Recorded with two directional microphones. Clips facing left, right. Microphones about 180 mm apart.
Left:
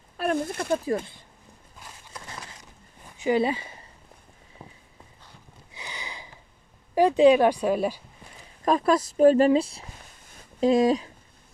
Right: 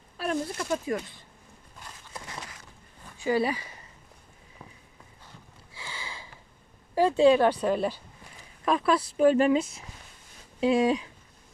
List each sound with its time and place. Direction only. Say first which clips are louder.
0.2 s speech: left 3 dB; 55° left (ahead or behind)
3.2 s speech: left 3 dB; 20° left (ahead or behind)
5.7 s sniff: left 1 dB; 20° left (ahead or behind)
6.9 s speech: left 3 dB; 15° left (ahead or behind)
8.6 s speech: left 3 dB; 40° left (ahead or behind)